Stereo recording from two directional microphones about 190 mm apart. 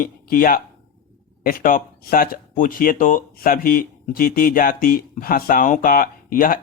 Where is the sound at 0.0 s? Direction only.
50° left (ahead or behind).